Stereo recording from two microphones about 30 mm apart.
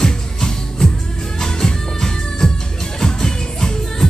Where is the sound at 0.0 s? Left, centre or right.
Left.